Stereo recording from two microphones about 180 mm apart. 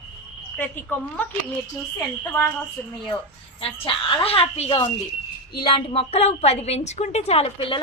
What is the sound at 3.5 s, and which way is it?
A woman's voice, 30° left (ahead or behind).